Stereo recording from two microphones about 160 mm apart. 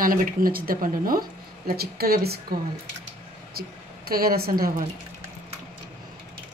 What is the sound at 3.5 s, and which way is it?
A woman's voice, 70° right (ahead or behind).